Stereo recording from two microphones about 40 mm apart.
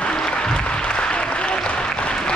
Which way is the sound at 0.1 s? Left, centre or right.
Left.